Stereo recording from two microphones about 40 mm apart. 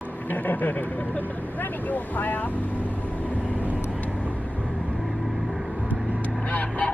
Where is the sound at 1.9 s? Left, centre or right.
Left.